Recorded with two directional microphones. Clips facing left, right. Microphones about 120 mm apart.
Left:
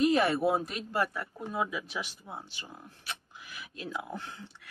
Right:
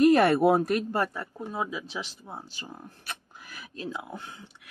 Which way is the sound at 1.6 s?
25° right (ahead or behind).